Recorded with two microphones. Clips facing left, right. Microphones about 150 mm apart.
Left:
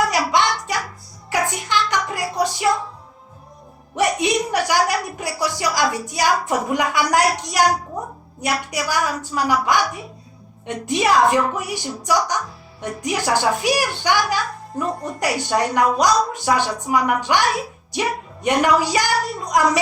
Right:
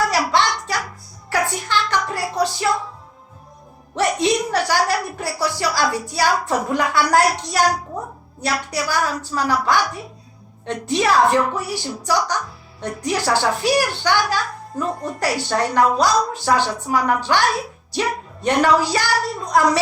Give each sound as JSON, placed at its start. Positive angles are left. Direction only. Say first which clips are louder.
{"t": 0.1, "sound": "music", "louder": "even", "side_deg": 15}
{"t": 1.3, "sound": "a sound", "louder": "even", "side_deg": 15}
{"t": 3.9, "sound": "a woman's voice", "louder": "right 1 dB", "side_deg": 15}
{"t": 18.4, "sound": "a woman's voice", "louder": "right 1 dB", "side_deg": 15}